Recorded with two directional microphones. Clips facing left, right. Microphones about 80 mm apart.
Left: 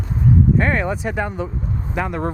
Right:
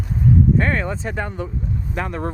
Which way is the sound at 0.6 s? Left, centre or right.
Centre.